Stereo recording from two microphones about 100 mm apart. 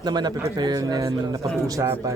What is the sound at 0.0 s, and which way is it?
A man's voice, 45° right (ahead or behind).